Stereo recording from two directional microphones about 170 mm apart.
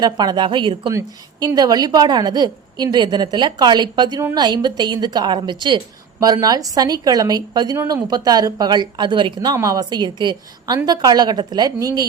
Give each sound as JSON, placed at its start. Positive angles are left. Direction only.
{"t": 0.0, "sound": "a woman's voice", "side_deg": -25}